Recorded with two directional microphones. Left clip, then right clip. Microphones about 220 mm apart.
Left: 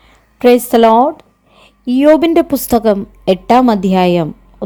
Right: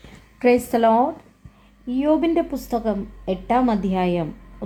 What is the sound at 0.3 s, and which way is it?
A woman's voice, 35° left (ahead or behind).